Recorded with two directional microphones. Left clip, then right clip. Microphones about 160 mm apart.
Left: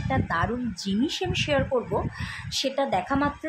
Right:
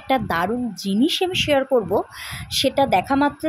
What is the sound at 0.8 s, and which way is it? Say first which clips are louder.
A woman's voice: right 9 dB; 30° right (ahead or behind).